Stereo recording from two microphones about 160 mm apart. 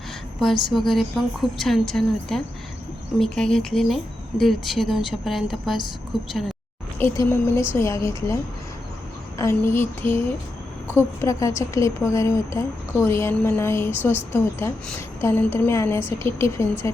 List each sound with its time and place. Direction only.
0.3 s speech: centre (ahead or behind)
7.0 s a woman's voice: 15° left (ahead or behind)
9.4 s a woman's voice: 15° left (ahead or behind)
11.2 s a woman's voice: 20° left (ahead or behind)